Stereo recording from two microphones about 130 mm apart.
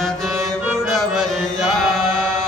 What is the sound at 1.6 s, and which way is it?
Chant, 5° right (ahead or behind).